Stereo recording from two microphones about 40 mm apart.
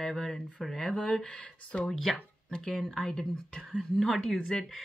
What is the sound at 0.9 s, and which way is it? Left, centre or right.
Speech, left.